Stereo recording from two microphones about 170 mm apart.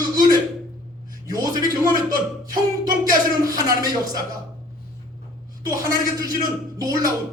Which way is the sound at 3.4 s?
20° right (ahead or behind).